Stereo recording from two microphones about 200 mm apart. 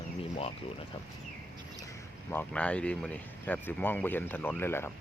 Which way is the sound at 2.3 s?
10° left (ahead or behind).